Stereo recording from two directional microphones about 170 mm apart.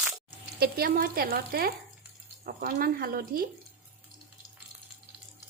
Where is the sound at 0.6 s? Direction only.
60° right (ahead or behind).